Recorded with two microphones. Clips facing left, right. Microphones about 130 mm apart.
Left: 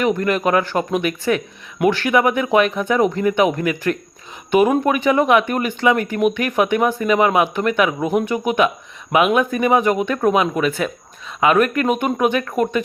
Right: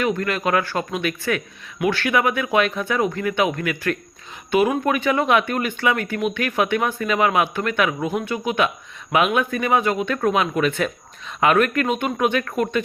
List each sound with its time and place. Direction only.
0.0 s speech: 15° left (ahead or behind)
4.8 s speech: 15° left (ahead or behind)